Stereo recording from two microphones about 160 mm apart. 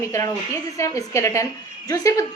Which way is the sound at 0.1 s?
20° left (ahead or behind).